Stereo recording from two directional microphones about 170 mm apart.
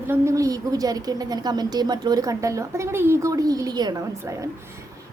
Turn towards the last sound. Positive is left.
turn(degrees=-20)  # may be behind; listen again after turning